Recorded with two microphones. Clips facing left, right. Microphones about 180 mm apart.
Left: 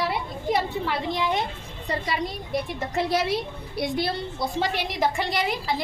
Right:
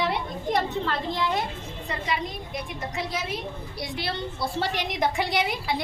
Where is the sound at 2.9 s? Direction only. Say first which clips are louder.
Left 8 dB; 70° left (ahead or behind).